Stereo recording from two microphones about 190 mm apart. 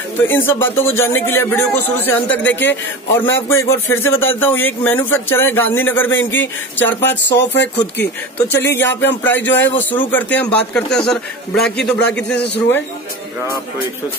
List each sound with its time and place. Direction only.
0.3 s speech: 10° left (ahead or behind)
7.1 s speech: 70° left (ahead or behind)
7.8 s speech: 10° left (ahead or behind)